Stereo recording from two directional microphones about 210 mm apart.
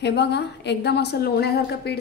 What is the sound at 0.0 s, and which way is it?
A woman's voice, 55° left (ahead or behind).